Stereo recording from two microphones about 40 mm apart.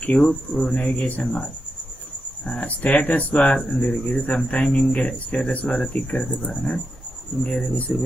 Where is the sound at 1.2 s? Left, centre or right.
Left.